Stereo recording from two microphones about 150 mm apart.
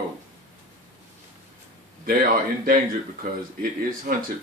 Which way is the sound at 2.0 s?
70° right (ahead or behind).